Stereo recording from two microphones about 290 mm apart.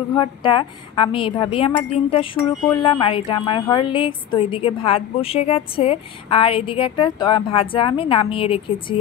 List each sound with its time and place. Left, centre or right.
0.1 s a woman's voice: centre